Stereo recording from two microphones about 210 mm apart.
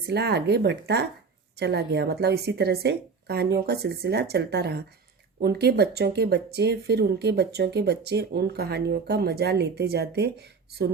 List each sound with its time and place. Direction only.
0.1 s speech: 50° right (ahead or behind)